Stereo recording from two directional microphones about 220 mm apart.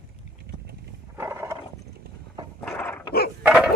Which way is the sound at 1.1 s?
10° right (ahead or behind).